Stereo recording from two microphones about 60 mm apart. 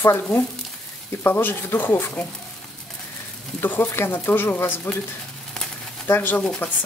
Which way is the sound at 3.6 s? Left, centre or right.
Left.